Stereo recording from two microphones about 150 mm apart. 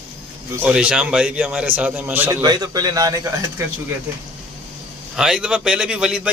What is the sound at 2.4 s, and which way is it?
Speech, 25° right (ahead or behind).